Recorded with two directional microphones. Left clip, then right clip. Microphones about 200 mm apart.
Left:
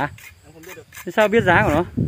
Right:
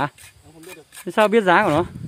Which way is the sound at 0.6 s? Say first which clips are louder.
Left 2 dB; 30° right (ahead or behind).